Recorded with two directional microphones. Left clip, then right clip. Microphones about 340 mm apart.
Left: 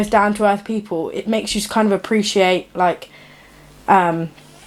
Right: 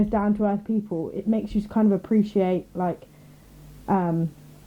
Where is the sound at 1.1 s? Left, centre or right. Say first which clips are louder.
Left 7 dB; centre.